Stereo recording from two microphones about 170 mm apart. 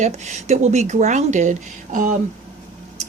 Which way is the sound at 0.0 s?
45° right (ahead or behind).